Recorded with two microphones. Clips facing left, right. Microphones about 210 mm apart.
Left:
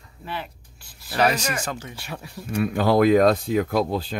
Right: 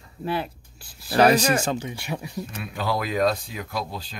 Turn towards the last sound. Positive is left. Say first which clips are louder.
# left 9 dB
turn(degrees=55)  # may be behind; listen again after turning